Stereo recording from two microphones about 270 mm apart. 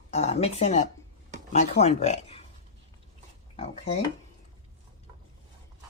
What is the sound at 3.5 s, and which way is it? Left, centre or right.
Speech, left.